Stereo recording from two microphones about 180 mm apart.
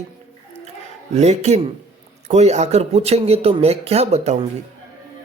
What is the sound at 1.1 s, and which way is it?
Speech, 40° right (ahead or behind).